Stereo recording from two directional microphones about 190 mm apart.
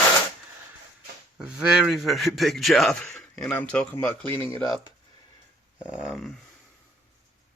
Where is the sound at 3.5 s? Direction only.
10° left (ahead or behind).